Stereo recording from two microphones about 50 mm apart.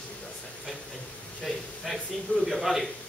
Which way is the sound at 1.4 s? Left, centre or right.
Centre.